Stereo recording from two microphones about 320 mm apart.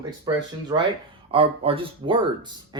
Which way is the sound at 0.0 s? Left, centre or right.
Centre.